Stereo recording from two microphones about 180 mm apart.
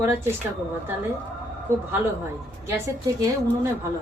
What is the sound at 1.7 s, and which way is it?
A woman's voice, 15° right (ahead or behind).